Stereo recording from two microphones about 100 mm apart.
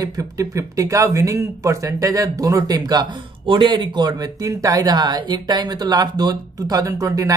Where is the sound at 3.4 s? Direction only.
55° right (ahead or behind); by 7.3 s 35° right (ahead or behind).